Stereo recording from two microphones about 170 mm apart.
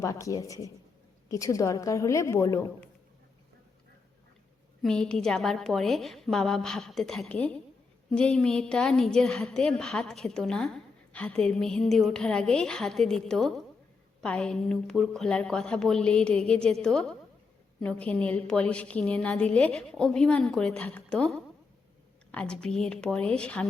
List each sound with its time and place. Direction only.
0.0 s a woman's voice: 20° left (ahead or behind)
4.8 s a woman's voice: 5° left (ahead or behind)